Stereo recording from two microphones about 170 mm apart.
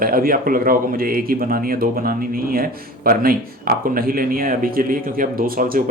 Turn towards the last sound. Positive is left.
turn(degrees=-60)  # may be behind; listen again after turning